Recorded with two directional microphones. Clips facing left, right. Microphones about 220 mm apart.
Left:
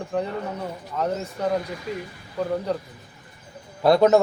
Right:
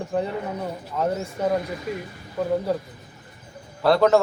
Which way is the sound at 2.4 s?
5° right (ahead or behind).